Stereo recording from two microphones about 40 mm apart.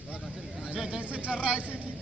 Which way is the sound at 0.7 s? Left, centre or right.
Centre.